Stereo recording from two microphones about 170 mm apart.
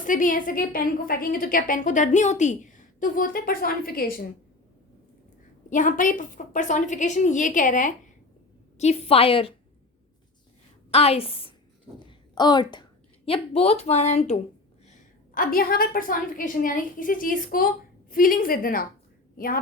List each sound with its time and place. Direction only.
0.0 s a woman's voice: 50° left (ahead or behind)
5.7 s a woman's voice: 50° left (ahead or behind)
8.8 s a woman's voice: 35° left (ahead or behind)
10.9 s a woman's voice: 35° left (ahead or behind)
11.9 s a sound: 25° left (ahead or behind)
13.2 s a woman's voice: 35° left (ahead or behind)
15.4 s a woman's voice: 55° left (ahead or behind)